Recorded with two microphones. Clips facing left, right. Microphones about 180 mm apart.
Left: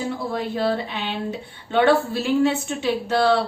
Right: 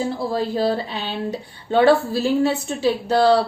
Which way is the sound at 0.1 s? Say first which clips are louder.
Right 3 dB; 35° right (ahead or behind).